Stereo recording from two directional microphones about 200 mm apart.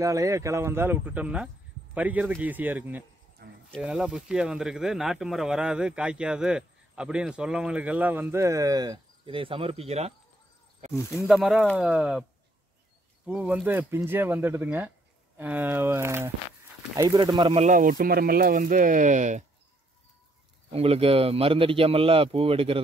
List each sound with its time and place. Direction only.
0.0 s speech: 15° right (ahead or behind)
3.4 s a sound: 55° right (ahead or behind)
3.7 s speech: centre (ahead or behind); by 10.1 s 30° right (ahead or behind)
11.0 s speech: 15° left (ahead or behind)
11.2 s speech: centre (ahead or behind)
13.3 s speech: 5° right (ahead or behind); by 19.4 s 40° right (ahead or behind)
20.7 s speech: 30° right (ahead or behind)